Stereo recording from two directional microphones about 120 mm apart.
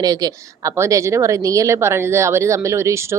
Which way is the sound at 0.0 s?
30° right (ahead or behind).